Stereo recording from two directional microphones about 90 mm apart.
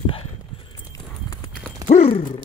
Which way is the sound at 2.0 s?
90° left.